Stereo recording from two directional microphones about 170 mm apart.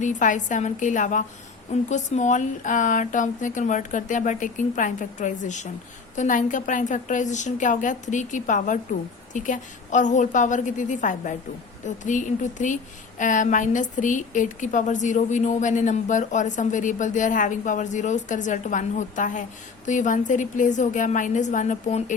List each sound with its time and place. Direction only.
0.0 s a woman's voice: 45° left (ahead or behind)